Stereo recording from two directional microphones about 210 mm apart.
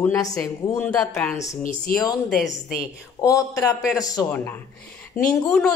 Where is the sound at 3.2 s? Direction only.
15° left (ahead or behind).